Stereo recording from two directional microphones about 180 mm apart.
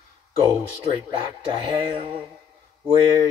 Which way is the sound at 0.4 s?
20° right (ahead or behind).